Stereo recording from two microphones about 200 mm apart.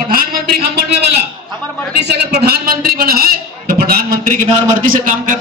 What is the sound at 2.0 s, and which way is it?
A man's voice, 50° right (ahead or behind).